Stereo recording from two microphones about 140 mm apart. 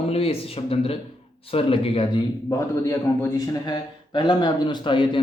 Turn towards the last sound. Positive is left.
turn(degrees=35)  # may be behind; listen again after turning